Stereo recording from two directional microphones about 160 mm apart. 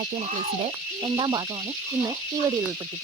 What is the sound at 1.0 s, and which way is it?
Speech, 30° right (ahead or behind).